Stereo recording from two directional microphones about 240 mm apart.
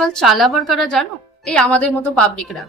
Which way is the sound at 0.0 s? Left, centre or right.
Centre.